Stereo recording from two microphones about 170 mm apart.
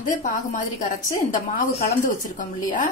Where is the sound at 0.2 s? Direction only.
50° left (ahead or behind).